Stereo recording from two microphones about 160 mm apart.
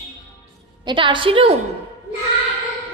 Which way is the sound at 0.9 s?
30° right (ahead or behind).